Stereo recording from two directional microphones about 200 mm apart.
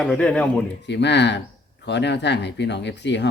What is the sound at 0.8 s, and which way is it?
Speech, 60° left (ahead or behind).